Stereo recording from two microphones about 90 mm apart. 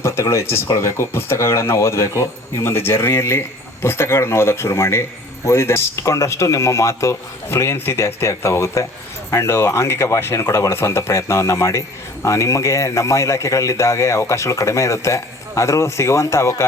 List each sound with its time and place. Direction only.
0.0 s a man's voice: 30° left (ahead or behind)